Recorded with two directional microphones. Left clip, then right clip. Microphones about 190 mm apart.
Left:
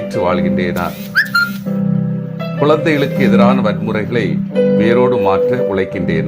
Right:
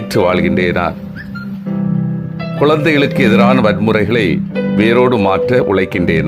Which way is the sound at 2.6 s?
35° right (ahead or behind).